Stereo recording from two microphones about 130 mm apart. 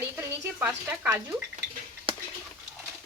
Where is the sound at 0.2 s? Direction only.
15° right (ahead or behind).